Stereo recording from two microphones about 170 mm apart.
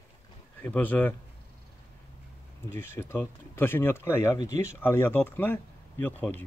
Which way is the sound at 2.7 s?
15° left (ahead or behind).